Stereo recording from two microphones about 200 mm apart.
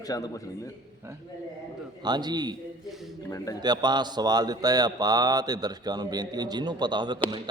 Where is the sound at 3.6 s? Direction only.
20° right (ahead or behind).